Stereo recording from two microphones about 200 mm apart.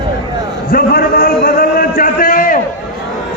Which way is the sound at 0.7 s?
50° left (ahead or behind).